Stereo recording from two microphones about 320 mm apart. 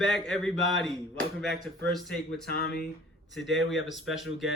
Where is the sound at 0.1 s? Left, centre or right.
Centre.